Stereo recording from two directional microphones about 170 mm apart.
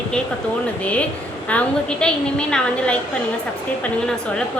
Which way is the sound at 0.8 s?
10° left (ahead or behind).